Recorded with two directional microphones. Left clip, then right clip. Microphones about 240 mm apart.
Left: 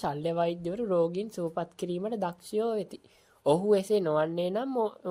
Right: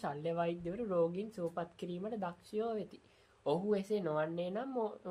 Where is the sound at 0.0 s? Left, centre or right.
Left.